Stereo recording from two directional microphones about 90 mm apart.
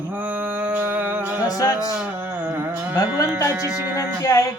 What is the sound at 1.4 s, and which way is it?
Speech, 40° left (ahead or behind).